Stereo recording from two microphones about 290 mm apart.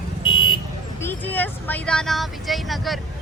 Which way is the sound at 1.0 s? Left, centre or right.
Centre.